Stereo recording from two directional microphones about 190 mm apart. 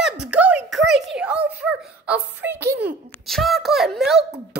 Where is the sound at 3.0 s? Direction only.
Centre (ahead or behind).